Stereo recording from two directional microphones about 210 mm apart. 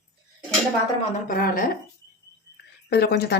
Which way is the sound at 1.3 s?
40° left (ahead or behind).